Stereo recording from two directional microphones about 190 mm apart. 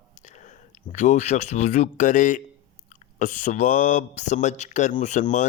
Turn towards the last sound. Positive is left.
turn(degrees=40)  # may be behind; listen again after turning